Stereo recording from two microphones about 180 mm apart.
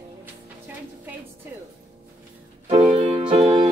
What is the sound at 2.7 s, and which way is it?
Music, 35° right (ahead or behind).